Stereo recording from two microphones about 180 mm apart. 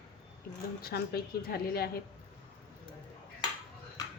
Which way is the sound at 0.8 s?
60° left (ahead or behind).